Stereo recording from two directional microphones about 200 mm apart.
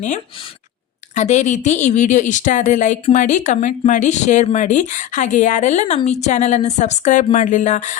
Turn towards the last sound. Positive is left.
turn(degrees=40)  # may be behind; listen again after turning